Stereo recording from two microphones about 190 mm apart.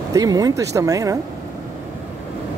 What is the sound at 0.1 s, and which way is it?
Speech, 20° right (ahead or behind).